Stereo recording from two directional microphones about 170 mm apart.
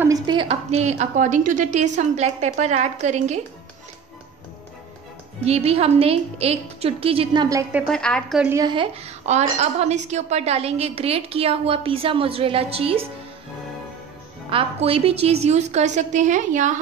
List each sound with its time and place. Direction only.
0.3 s a woman's voice: 35° right (ahead or behind)
5.4 s a woman's voice: 35° right (ahead or behind)
7.9 s a woman's voice: 5° left (ahead or behind)
8.5 s speech: 25° right (ahead or behind)
9.0 s a woman's voice: 40° right (ahead or behind)
14.5 s a woman's voice: 35° right (ahead or behind)